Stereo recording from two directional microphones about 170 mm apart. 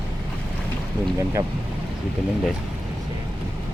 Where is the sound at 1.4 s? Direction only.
30° right (ahead or behind).